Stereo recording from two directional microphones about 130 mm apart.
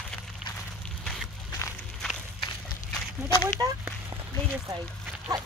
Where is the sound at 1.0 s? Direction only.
5° left (ahead or behind).